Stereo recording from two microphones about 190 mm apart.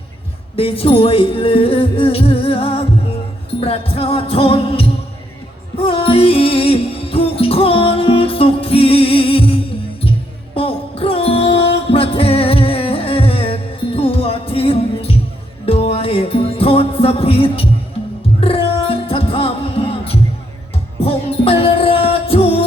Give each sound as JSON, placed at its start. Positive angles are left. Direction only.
{"t": 0.5, "sound": "speech", "side_deg": 30}
{"t": 5.7, "sound": "music", "side_deg": 30}